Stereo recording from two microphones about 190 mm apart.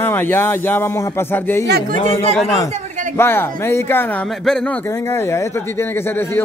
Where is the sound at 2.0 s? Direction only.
30° left (ahead or behind).